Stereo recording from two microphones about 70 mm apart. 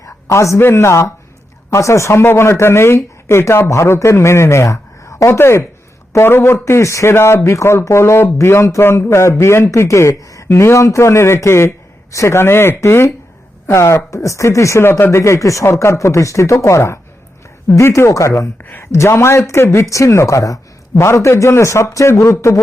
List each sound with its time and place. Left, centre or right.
0.0 s speech: left
5.3 s speech: left
10.2 s a sound: left
10.5 s speech: left